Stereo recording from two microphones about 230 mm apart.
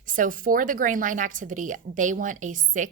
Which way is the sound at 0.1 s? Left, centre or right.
Right.